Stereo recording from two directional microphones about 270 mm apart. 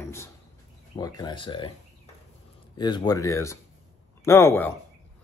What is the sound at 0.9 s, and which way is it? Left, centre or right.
Speech, centre.